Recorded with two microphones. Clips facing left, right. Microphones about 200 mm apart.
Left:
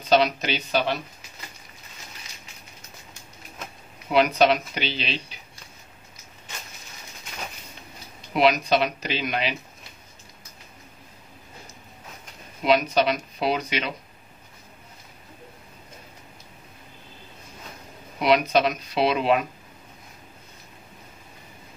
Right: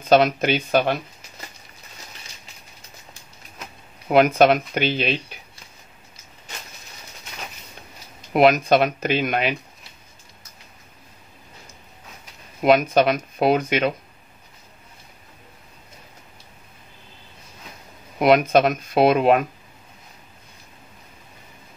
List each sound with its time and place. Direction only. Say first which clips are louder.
0.0 s speech: right 4 dB; 50° right (ahead or behind)
4.1 s speech: right 4 dB; 50° right (ahead or behind)
8.3 s speech: right 5 dB; 50° right (ahead or behind)
12.6 s speech: right 4 dB; 50° right (ahead or behind)
18.2 s speech: right 4 dB; 50° right (ahead or behind)